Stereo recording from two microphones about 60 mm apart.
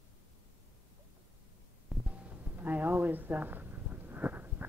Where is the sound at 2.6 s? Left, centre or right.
Right.